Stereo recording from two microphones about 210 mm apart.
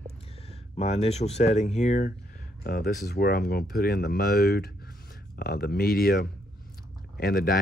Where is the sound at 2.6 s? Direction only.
45° left (ahead or behind).